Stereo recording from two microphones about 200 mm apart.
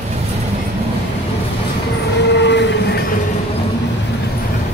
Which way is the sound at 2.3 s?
60° left (ahead or behind).